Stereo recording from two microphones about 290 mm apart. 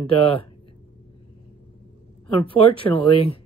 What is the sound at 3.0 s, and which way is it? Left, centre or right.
Speech, centre.